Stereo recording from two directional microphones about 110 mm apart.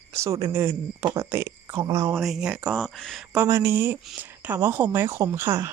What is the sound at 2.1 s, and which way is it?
Speech, 5° right (ahead or behind).